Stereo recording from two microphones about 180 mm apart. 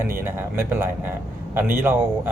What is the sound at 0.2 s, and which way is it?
Speech, 15° right (ahead or behind).